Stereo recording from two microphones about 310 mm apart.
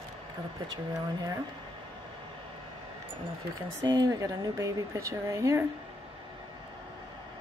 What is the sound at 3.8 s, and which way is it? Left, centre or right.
Speech, centre.